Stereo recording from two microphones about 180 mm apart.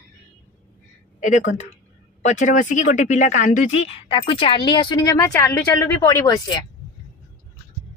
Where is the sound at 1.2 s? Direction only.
40° left (ahead or behind); by 6.6 s 20° left (ahead or behind).